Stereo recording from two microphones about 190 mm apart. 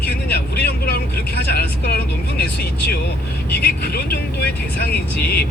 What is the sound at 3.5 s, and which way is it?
Speech, 55° left (ahead or behind).